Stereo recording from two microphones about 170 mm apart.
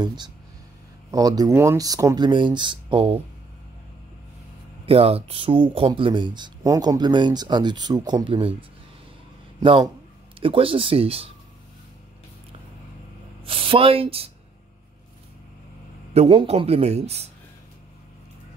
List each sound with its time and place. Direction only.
0.0 s speech: 25° right (ahead or behind)
4.8 s a man's voice: 35° right (ahead or behind)
13.5 s speech: 30° right (ahead or behind)
16.1 s a man's voice: 35° right (ahead or behind)